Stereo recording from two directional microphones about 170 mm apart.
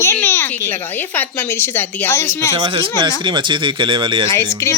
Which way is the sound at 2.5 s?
30° right (ahead or behind).